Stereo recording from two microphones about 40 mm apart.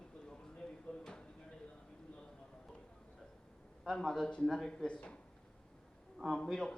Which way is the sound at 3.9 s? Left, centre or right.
Centre.